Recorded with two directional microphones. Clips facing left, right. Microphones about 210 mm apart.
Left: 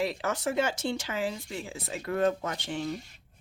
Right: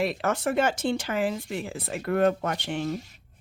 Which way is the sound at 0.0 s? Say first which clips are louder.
Right 4 dB; 60° right (ahead or behind).